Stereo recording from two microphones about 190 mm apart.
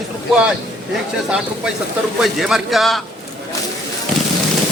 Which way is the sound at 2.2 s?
Centre (ahead or behind).